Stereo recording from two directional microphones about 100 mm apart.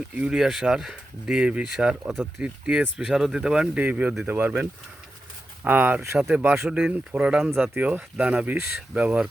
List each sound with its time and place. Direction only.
0.1 s speech: 10° right (ahead or behind); by 6.1 s 25° right (ahead or behind)
6.1 s speech: 10° right (ahead or behind)